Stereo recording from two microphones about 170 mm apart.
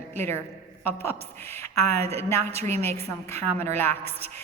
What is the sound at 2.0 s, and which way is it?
A woman's voice, 15° left (ahead or behind).